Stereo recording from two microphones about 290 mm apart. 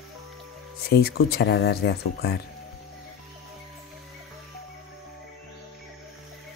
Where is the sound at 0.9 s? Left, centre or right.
Left.